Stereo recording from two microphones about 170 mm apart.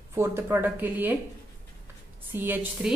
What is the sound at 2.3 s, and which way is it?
Speech, 10° right (ahead or behind).